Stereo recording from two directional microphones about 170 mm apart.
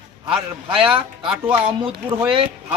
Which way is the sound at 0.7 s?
30° right (ahead or behind).